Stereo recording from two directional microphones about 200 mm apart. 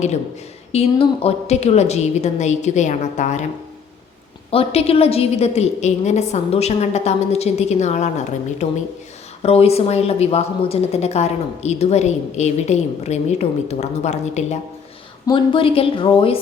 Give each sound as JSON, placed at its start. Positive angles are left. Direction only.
{"t": 0.7, "sound": "a woman's voice", "side_deg": 30}
{"t": 4.5, "sound": "a woman's voice", "side_deg": 30}